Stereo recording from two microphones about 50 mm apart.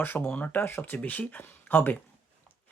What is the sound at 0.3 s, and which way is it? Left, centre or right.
Speech, left.